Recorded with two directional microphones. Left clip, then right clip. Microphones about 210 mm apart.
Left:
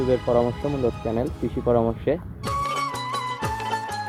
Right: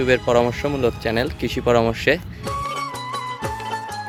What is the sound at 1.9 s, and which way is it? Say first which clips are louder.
Music: right 6 dB; 5° right (ahead or behind).